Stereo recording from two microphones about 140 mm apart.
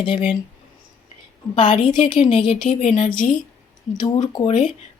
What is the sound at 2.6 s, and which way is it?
Speech, 60° left (ahead or behind).